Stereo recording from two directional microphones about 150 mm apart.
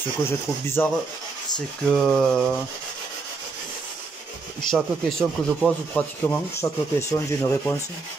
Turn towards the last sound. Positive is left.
turn(degrees=20)  # may be behind; listen again after turning